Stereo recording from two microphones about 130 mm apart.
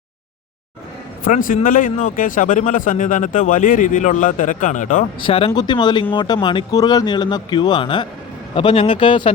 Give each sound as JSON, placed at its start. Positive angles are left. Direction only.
{"t": 1.2, "sound": "speech", "side_deg": 90}
{"t": 5.2, "sound": "speech", "side_deg": 50}
{"t": 5.5, "sound": "speech", "side_deg": 35}